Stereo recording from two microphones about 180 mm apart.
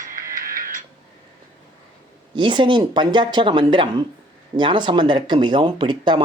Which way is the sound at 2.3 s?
25° right (ahead or behind).